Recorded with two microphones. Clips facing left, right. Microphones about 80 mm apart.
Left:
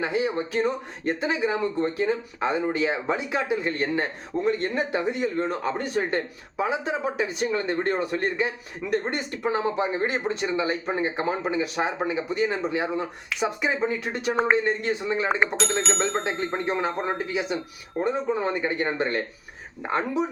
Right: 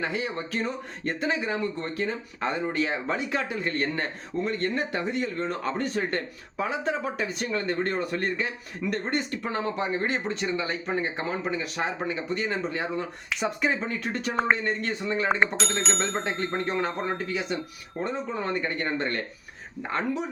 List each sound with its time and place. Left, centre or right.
0.0 s speech: centre
14.6 s speech: centre
15.3 s speech: centre; by 20.2 s left